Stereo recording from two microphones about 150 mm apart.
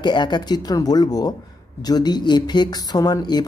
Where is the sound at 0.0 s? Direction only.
30° left (ahead or behind).